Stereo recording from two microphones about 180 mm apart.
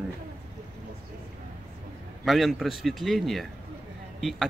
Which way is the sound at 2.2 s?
Centre (ahead or behind).